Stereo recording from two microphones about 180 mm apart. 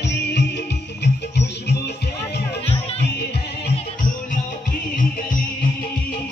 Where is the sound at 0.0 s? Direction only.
75° left (ahead or behind).